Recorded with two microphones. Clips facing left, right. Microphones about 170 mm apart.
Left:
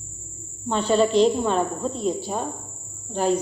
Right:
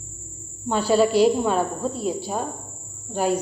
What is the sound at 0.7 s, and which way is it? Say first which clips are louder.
A woman's voice: right 1 dB; 5° right (ahead or behind).